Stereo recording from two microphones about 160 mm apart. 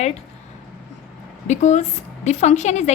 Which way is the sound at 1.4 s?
45° left (ahead or behind).